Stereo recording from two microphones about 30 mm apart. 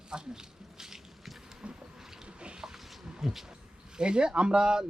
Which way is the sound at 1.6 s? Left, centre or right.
Right.